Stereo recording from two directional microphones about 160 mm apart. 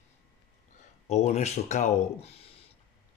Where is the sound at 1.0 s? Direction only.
45° left (ahead or behind).